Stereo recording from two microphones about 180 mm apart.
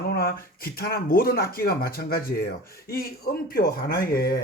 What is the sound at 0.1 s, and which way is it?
Speech, 55° left (ahead or behind).